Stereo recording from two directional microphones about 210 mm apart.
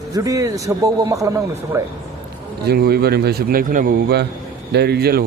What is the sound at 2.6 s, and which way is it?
A man's voice, 50° right (ahead or behind).